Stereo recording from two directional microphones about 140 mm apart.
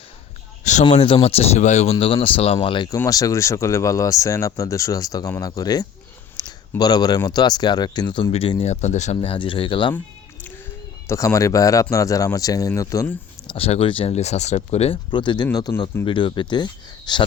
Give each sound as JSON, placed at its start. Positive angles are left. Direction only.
{"t": 0.6, "sound": "a sound", "side_deg": 55}
{"t": 0.9, "sound": "speech", "side_deg": 45}
{"t": 6.3, "sound": "a sound", "side_deg": 30}
{"t": 7.2, "sound": "speech", "side_deg": 30}
{"t": 8.7, "sound": "speech", "side_deg": 55}
{"t": 11.1, "sound": "speech", "side_deg": 25}
{"t": 13.5, "sound": "speech", "side_deg": 45}
{"t": 15.1, "sound": "speech", "side_deg": 35}